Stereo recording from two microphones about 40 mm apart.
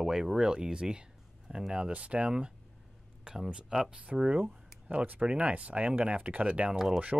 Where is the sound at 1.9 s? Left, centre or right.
Right.